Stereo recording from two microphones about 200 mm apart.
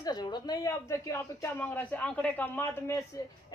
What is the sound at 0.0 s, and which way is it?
Speech, 20° left (ahead or behind).